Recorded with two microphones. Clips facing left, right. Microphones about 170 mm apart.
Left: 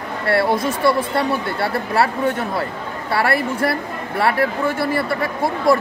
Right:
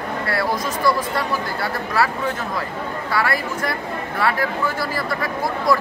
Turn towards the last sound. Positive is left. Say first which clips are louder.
# left 3 dB
turn(degrees=25)  # may be behind; listen again after turning